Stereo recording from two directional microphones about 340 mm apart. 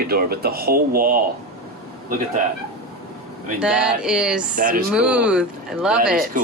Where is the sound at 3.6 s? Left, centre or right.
Centre.